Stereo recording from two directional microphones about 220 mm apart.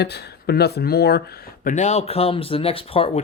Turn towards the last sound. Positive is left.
turn(degrees=25)  # may be behind; listen again after turning